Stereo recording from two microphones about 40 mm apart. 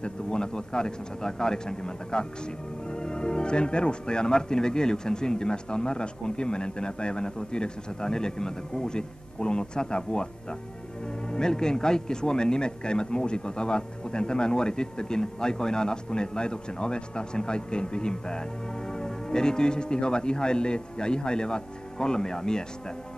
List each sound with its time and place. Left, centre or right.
0.0 s speech: left
11.3 s speech: centre